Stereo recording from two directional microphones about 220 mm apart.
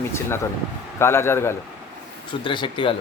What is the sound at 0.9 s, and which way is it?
Speech, 10° left (ahead or behind).